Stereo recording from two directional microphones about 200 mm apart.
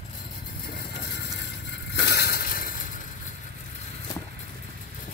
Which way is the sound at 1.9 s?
55° left (ahead or behind).